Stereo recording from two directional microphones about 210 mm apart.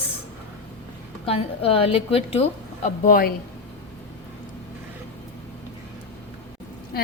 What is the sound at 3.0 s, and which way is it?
Speech, 40° left (ahead or behind).